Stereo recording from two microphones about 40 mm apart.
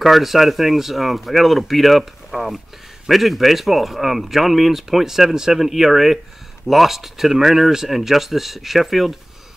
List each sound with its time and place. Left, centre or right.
0.0 s speech: centre